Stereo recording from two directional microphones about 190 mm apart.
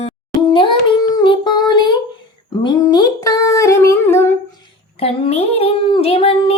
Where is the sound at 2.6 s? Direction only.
20° left (ahead or behind).